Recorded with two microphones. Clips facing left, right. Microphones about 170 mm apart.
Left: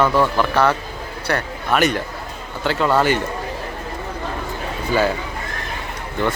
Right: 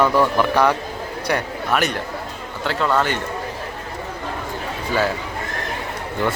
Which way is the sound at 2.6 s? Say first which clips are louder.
Left 2 dB; centre (ahead or behind).